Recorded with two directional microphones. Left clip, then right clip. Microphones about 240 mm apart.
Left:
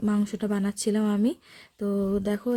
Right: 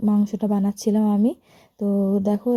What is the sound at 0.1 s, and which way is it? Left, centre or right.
Speech, centre.